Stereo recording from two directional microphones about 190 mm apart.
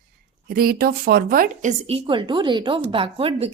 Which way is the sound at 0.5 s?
50° right (ahead or behind).